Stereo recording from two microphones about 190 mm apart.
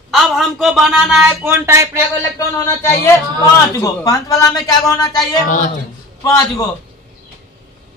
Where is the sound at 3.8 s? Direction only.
20° left (ahead or behind).